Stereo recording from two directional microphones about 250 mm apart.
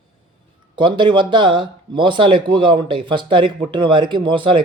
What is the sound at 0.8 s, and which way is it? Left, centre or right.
Speech, centre.